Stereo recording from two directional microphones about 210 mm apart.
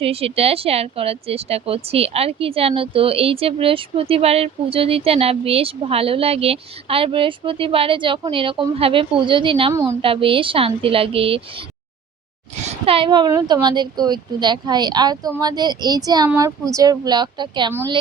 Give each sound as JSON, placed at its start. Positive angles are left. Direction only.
{"t": 0.0, "sound": "speech", "side_deg": -25}
{"t": 12.8, "sound": "speech", "side_deg": -25}